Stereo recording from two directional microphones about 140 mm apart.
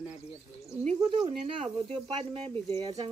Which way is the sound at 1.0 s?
40° right (ahead or behind).